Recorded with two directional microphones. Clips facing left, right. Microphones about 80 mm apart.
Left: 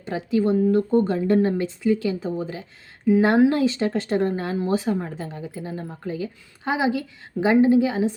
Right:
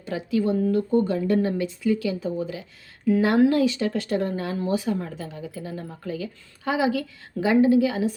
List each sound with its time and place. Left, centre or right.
0.0 s speech: left